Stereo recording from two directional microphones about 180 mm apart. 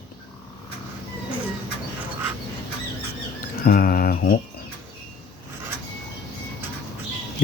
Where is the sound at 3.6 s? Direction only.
50° left (ahead or behind).